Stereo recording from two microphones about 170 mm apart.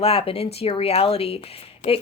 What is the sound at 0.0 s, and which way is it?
Speech, 35° left (ahead or behind).